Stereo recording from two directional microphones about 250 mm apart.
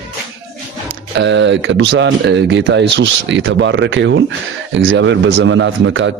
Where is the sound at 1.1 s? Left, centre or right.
Right.